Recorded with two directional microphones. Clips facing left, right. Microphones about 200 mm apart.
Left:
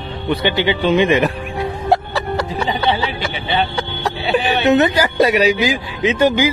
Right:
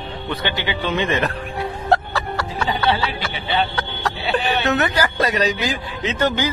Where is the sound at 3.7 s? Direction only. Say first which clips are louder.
Left 3 dB; 10° left (ahead or behind).